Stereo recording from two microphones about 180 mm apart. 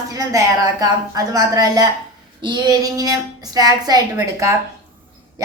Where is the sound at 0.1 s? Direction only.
20° right (ahead or behind).